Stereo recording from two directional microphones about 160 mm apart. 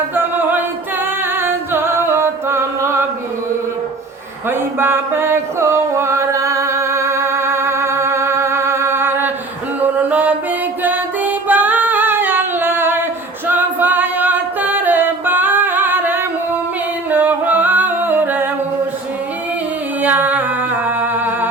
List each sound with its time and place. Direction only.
0.1 s a capella: 10° right (ahead or behind)
1.4 s singing: 15° right (ahead or behind)
4.4 s music: 15° right (ahead or behind)
10.8 s singing: 10° right (ahead or behind)
13.5 s music: 10° right (ahead or behind)
17.1 s singing: 10° right (ahead or behind)
20.0 s singing: 10° right (ahead or behind)
20.8 s music: 10° right (ahead or behind)